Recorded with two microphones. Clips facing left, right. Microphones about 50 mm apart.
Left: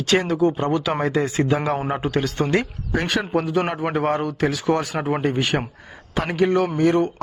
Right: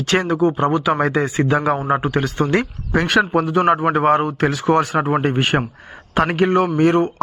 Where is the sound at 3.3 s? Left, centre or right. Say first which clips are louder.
Right 6 dB; right.